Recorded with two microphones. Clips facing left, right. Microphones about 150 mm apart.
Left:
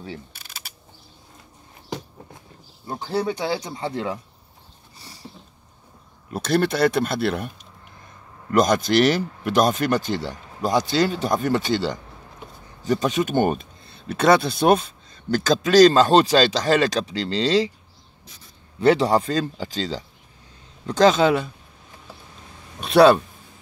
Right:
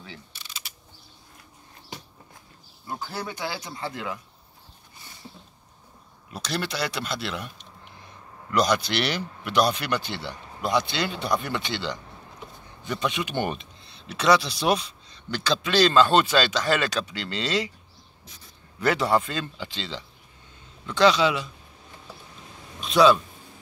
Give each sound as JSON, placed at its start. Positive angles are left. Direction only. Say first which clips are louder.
{"t": 0.3, "sound": "camera", "louder": "left 1 dB", "side_deg": 50}
{"t": 2.9, "sound": "speech", "louder": "left 9 dB", "side_deg": 30}
{"t": 4.9, "sound": "a sound", "louder": "left 4 dB", "side_deg": 35}
{"t": 6.3, "sound": "speech", "louder": "left 9 dB", "side_deg": 50}
{"t": 18.8, "sound": "speech", "louder": "left 5 dB", "side_deg": 30}
{"t": 22.8, "sound": "a man's voice", "louder": "left 5 dB", "side_deg": 60}